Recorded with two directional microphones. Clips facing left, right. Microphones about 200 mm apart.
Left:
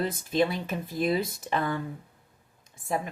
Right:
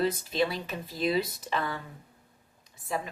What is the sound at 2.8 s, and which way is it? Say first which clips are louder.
Speech: left 3 dB; 50° left (ahead or behind).